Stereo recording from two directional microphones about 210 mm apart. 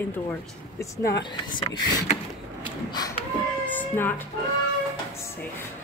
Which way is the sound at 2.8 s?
20° left (ahead or behind).